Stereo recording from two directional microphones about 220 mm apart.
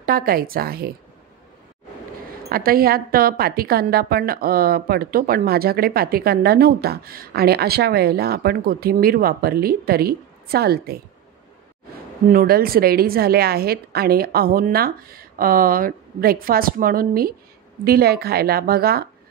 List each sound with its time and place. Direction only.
0.0 s a woman's voice: 40° right (ahead or behind)
2.5 s a woman's voice: 45° right (ahead or behind)
12.3 s a woman's voice: 40° right (ahead or behind)